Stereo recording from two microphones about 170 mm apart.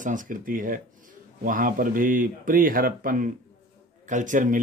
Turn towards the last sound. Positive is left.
turn(degrees=-50)  # may be behind; listen again after turning